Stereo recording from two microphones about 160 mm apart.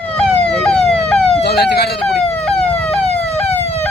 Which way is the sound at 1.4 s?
85° left.